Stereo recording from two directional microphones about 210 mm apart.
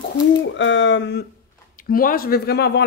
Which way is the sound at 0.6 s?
60° left (ahead or behind).